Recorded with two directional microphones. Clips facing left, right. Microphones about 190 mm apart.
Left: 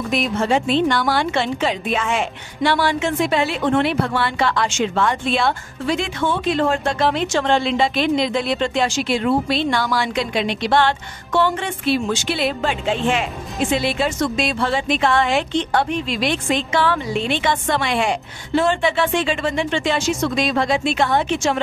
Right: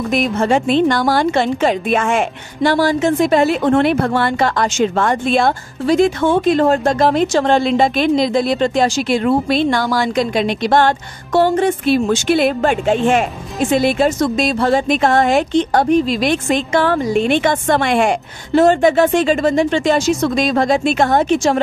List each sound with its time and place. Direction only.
0.1 s a woman's voice: 45° right (ahead or behind)